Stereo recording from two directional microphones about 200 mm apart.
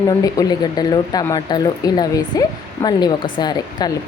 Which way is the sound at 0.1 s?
20° left (ahead or behind).